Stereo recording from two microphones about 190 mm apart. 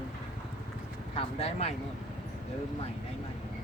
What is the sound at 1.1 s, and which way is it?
Speech, 30° left (ahead or behind).